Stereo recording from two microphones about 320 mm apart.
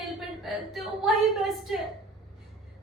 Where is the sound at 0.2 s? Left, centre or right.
Centre.